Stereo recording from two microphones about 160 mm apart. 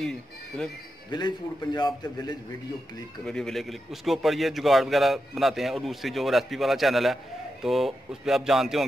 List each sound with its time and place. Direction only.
1.1 s a man's voice: 25° left (ahead or behind)
3.3 s a man's voice: 5° left (ahead or behind)